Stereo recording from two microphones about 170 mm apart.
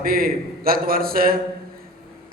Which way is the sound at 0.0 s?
60° right (ahead or behind).